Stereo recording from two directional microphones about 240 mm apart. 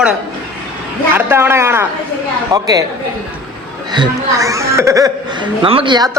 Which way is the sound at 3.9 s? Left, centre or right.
Centre.